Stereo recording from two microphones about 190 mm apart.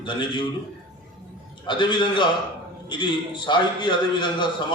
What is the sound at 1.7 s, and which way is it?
A man's voice, 25° left (ahead or behind).